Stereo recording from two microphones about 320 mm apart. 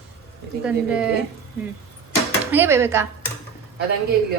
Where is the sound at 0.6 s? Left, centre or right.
Centre.